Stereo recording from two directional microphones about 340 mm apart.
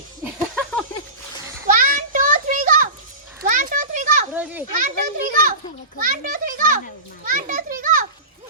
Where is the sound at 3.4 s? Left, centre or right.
Right.